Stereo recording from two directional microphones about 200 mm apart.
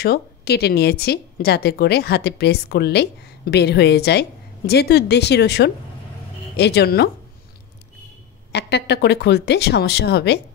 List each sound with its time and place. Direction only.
0.0 s speech: 50° left (ahead or behind)
8.5 s speech: 55° left (ahead or behind)